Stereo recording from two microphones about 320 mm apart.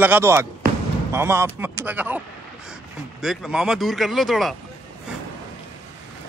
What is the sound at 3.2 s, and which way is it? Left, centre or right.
A man's voice, centre.